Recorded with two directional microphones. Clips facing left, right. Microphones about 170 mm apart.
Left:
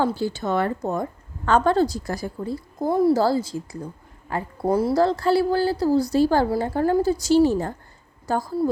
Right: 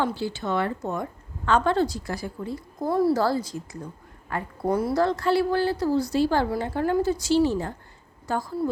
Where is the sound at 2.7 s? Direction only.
20° left (ahead or behind); by 8.7 s 40° left (ahead or behind).